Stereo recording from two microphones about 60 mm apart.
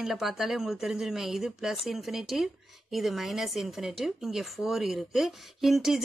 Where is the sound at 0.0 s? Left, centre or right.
Centre.